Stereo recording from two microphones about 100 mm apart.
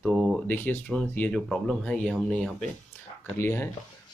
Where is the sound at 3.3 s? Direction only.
25° left (ahead or behind).